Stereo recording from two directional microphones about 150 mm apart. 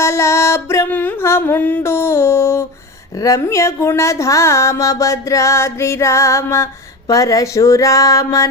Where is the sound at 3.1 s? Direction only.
20° left (ahead or behind).